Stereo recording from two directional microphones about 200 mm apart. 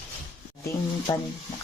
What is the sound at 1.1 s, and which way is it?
Music, 20° left (ahead or behind).